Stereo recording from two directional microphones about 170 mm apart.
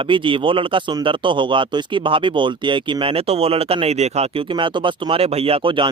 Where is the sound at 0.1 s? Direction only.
30° right (ahead or behind).